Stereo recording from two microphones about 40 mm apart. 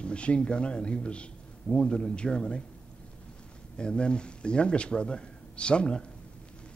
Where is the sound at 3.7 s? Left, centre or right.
Left.